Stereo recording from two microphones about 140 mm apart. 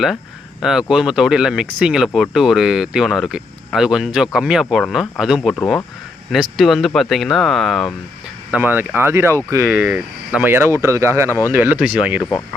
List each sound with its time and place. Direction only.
0.6 s speech: 5° right (ahead or behind)
8.4 s speech: 10° right (ahead or behind)